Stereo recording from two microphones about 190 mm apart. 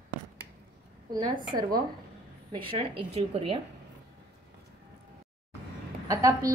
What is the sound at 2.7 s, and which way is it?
Speech, 30° right (ahead or behind).